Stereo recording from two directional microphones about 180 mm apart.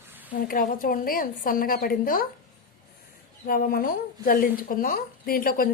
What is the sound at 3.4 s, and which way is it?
A woman's voice, 50° left (ahead or behind).